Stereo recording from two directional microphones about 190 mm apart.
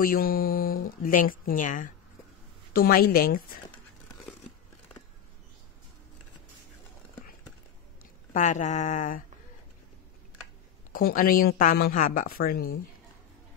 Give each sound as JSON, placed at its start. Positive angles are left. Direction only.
{"t": 0.0, "sound": "a woman's voice", "side_deg": 50}
{"t": 8.3, "sound": "a sound", "side_deg": 40}
{"t": 10.9, "sound": "a woman's voice", "side_deg": 50}